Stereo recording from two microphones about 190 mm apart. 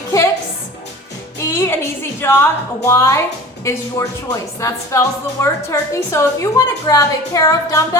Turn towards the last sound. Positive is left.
turn(degrees=15)  # may be behind; listen again after turning